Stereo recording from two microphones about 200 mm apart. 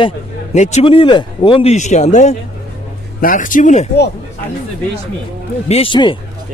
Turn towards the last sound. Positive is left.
turn(degrees=25)  # may be behind; listen again after turning